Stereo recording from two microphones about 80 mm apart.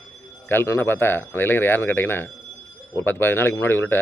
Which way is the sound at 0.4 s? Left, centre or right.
Left.